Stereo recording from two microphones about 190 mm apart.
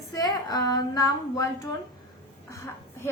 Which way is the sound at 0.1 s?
20° left (ahead or behind).